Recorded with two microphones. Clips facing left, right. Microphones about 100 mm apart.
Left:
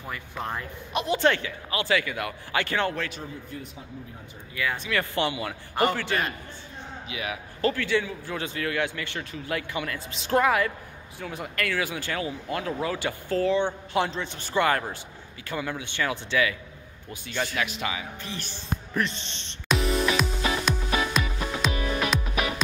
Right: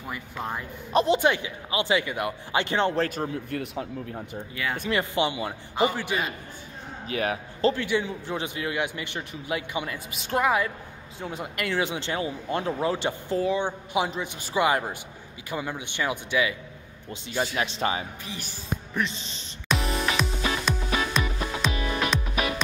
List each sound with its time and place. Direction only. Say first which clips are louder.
0.0 s speech: even; 10° right (ahead or behind)
0.9 s a man's voice: right 6 dB; 30° right (ahead or behind)
1.2 s a man's voice: even; 15° right (ahead or behind)
3.4 s speech: right 8 dB; 70° right (ahead or behind)
4.6 s a man's voice: even; 25° right (ahead or behind)
5.9 s speech: left 1 dB; 10° right (ahead or behind)
7.1 s speech: right 6 dB; 45° right (ahead or behind)
7.6 s a man's voice: right 1 dB; 20° right (ahead or behind)
17.6 s speech: right 3 dB; 30° right (ahead or behind)
18.2 s speech: left 1 dB; 15° right (ahead or behind)
19.7 s music: left 2 dB; centre (ahead or behind)